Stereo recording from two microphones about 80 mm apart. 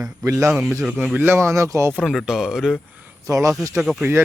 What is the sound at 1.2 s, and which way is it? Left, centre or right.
Speech, right.